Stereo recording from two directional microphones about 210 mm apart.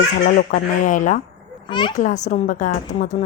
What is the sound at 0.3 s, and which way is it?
A woman's voice, 40° left (ahead or behind).